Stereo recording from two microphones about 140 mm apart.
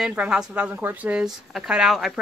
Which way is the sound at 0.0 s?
5° right (ahead or behind).